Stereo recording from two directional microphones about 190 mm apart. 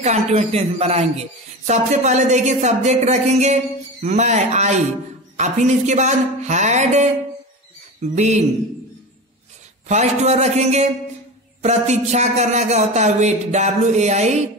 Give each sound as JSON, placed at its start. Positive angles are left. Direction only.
{"t": 0.0, "sound": "speech", "side_deg": -35}
{"t": 9.8, "sound": "speech", "side_deg": -35}